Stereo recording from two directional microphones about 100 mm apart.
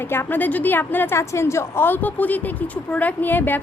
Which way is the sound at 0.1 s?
20° left (ahead or behind).